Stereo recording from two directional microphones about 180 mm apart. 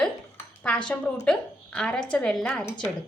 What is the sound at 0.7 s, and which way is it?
A woman's voice, 5° left (ahead or behind).